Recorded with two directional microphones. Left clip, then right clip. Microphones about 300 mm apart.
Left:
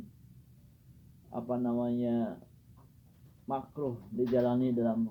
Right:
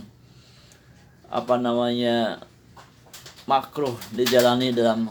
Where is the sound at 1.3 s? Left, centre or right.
Centre.